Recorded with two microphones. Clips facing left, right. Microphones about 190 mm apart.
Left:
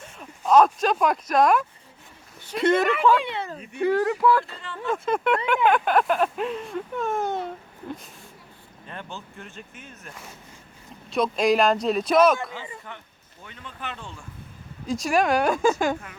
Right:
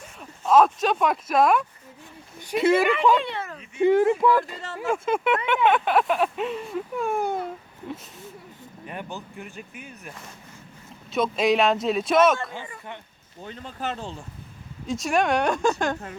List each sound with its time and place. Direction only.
0.2 s speech: centre (ahead or behind)
3.8 s speech: 20° right (ahead or behind)
4.5 s speech: 40° right (ahead or behind)
4.8 s speech: 5° right (ahead or behind)
11.1 s speech: centre (ahead or behind)
13.4 s speech: 35° right (ahead or behind)
14.8 s speech: centre (ahead or behind)